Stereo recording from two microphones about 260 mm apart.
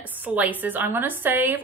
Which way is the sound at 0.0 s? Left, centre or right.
Centre.